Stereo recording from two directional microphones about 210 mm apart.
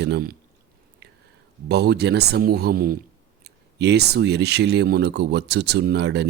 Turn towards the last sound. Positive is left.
turn(degrees=-55)  # may be behind; listen again after turning